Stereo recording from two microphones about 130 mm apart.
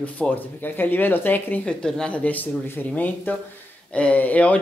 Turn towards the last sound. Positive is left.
turn(degrees=10)  # may be behind; listen again after turning